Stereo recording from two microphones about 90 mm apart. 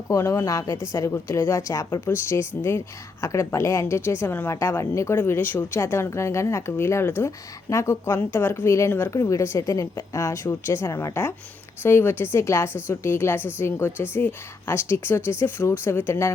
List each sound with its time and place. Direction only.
0.1 s speech: 35° left (ahead or behind)